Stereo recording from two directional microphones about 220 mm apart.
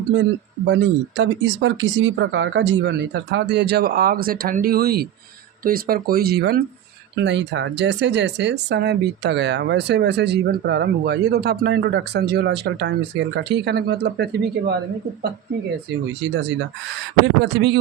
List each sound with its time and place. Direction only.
0.7 s speech: 60° right (ahead or behind)
16.2 s speech: 55° right (ahead or behind)